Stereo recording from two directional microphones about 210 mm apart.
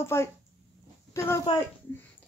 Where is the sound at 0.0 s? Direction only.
10° left (ahead or behind).